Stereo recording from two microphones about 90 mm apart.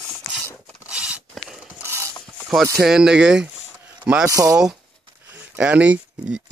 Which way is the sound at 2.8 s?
5° right (ahead or behind).